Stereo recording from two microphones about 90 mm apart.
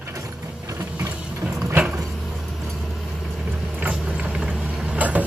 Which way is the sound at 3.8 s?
10° right (ahead or behind).